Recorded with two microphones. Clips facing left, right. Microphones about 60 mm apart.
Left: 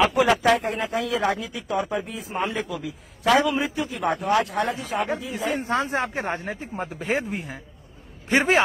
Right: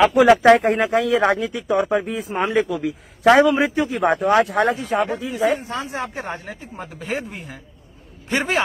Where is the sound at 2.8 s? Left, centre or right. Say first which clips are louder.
Right 6 dB; right.